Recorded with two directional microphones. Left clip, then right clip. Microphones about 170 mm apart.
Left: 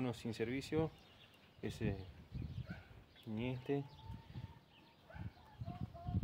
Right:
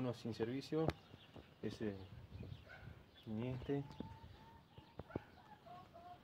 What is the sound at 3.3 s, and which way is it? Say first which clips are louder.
Speech: left 1 dB; 30° left (ahead or behind).